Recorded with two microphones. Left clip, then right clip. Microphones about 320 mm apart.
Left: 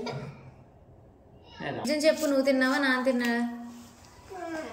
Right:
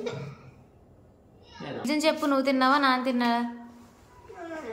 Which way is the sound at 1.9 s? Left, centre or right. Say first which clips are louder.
Even; centre.